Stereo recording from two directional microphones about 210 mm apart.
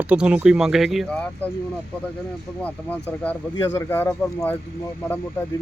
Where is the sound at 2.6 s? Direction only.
5° left (ahead or behind).